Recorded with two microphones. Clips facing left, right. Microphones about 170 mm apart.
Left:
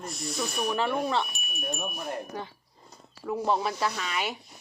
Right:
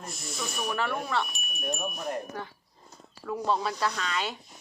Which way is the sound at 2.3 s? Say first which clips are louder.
Left 1 dB; 15° left (ahead or behind).